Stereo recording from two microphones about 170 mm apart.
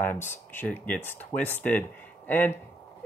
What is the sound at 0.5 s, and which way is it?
Speech, 10° left (ahead or behind).